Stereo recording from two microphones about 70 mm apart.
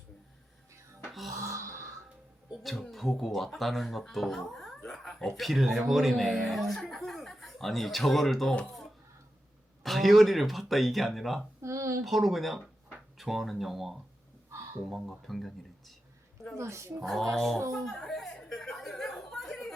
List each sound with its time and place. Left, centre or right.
1.1 s music: centre
1.4 s a sound: right
2.5 s speech: centre
9.8 s speech: centre
11.6 s a sound: right
12.0 s speech: centre
16.6 s speech: right
17.0 s speech: centre
17.7 s a sound: centre